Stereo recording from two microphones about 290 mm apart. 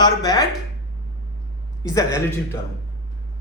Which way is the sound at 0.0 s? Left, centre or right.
Centre.